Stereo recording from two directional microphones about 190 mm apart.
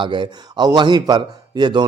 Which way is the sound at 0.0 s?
25° right (ahead or behind).